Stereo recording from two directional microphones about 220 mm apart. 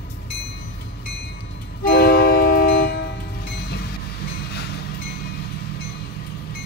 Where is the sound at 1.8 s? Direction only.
45° left (ahead or behind).